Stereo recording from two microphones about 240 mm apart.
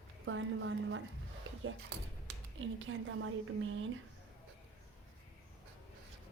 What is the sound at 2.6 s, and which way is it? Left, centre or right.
A woman's voice, right.